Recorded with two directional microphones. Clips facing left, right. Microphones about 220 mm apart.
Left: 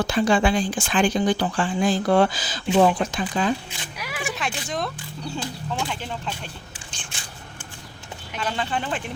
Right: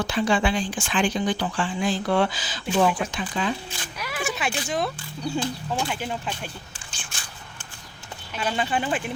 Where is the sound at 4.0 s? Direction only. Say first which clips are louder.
Right 1 dB; 10° left (ahead or behind).